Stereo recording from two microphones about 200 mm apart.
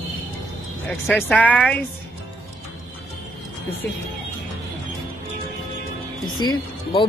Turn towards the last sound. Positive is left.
turn(degrees=20)  # may be behind; listen again after turning